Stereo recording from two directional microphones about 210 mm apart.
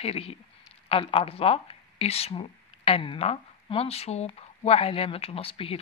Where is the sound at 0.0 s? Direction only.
25° left (ahead or behind).